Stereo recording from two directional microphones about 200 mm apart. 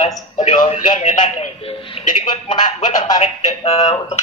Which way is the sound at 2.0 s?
30° left (ahead or behind).